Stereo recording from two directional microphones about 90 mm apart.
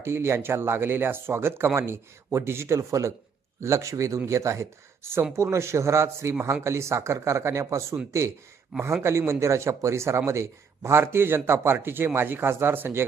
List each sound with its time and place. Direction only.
0.0 s speech: 30° right (ahead or behind)